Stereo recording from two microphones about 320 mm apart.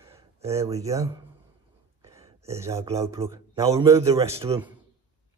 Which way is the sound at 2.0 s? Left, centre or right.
Centre.